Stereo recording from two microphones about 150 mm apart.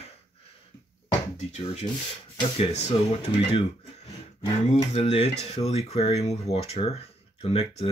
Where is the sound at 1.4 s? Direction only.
50° left (ahead or behind).